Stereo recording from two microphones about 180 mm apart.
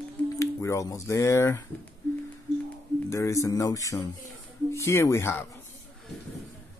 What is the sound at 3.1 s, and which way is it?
Speech, 15° left (ahead or behind).